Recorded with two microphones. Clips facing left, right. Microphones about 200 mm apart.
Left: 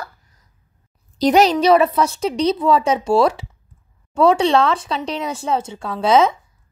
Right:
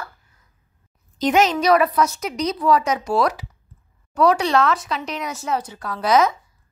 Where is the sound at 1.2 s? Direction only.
35° left (ahead or behind).